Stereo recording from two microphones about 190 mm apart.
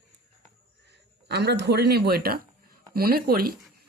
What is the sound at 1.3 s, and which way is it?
A woman's voice, 60° right (ahead or behind).